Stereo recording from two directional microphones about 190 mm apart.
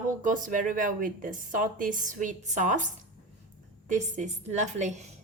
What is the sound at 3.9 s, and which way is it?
A woman's voice, 40° right (ahead or behind).